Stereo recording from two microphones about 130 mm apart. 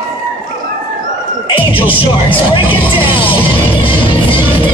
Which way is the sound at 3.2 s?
40° left (ahead or behind).